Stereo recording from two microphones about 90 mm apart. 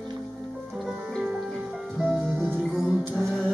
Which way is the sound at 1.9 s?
Centre (ahead or behind).